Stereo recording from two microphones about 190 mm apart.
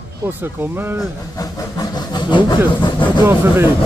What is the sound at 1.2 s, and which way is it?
Speech, 20° left (ahead or behind).